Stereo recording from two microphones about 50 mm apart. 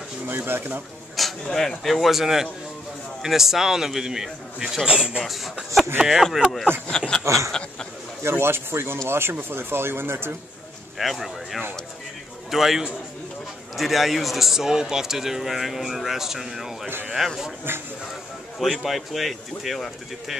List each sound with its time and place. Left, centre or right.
0.3 s speech: right
1.1 s speech: centre
5.2 s speech: centre
7.2 s a sound: right
8.2 s speech: right
11.0 s speech: centre
17.7 s speech: right
18.6 s speech: centre